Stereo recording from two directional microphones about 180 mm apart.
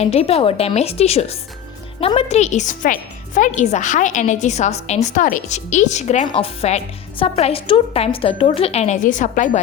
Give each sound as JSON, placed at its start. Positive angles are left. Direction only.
{"t": 0.0, "sound": "speech", "side_deg": 35}